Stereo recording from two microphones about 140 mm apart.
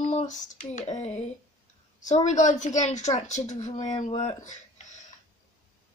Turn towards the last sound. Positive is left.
turn(degrees=60)  # may be behind; listen again after turning